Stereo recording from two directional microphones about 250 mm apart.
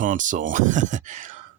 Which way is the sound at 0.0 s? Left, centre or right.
Right.